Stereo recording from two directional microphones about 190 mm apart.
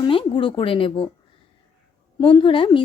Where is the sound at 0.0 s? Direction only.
25° left (ahead or behind).